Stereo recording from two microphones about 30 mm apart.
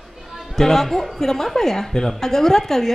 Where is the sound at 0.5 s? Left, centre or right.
Centre.